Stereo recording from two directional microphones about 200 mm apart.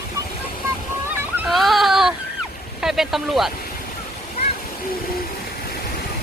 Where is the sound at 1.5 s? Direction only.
Centre (ahead or behind).